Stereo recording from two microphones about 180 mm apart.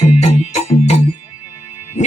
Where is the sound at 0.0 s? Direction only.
40° left (ahead or behind).